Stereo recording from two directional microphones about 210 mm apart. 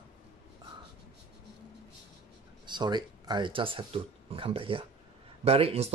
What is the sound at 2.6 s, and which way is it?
Speech, 20° right (ahead or behind).